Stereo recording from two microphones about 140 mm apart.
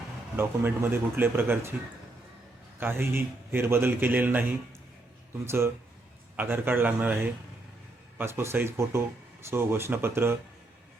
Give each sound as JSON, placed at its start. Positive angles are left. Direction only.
{"t": 0.3, "sound": "a man's voice", "side_deg": -15}
{"t": 2.8, "sound": "a man's voice", "side_deg": -15}